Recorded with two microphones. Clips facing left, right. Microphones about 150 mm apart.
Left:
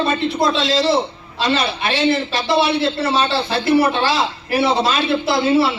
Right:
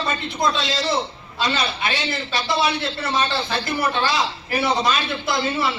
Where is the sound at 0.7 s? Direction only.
30° left (ahead or behind).